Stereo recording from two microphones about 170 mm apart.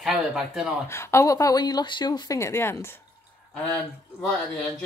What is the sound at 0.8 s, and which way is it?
Speech, 15° left (ahead or behind).